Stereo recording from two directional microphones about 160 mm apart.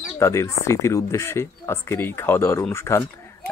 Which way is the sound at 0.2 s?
15° left (ahead or behind).